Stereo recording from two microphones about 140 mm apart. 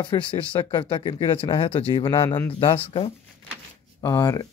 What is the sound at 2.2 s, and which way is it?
Speech, 20° left (ahead or behind).